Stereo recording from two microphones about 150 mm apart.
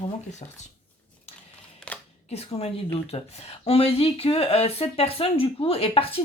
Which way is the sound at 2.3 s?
45° left (ahead or behind).